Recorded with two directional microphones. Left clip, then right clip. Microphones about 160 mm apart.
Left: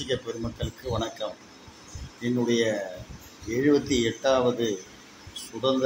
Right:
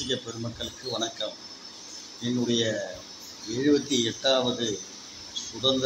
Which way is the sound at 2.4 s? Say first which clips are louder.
Left 2 dB; 20° left (ahead or behind).